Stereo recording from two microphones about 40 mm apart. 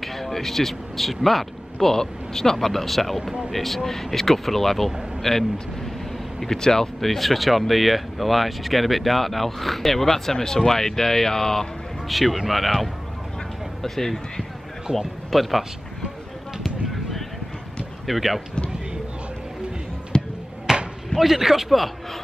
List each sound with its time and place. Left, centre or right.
0.0 s a man's voice: centre
12.1 s a man's voice: centre
18.0 s speech: centre
20.1 s a sound: left
20.7 s basketball bounce: centre
21.2 s speech: centre